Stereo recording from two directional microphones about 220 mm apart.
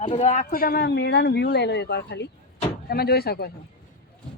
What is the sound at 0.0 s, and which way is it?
Speech, 30° left (ahead or behind).